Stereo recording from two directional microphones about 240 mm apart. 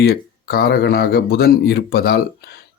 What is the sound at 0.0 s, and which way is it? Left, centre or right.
Speech, left.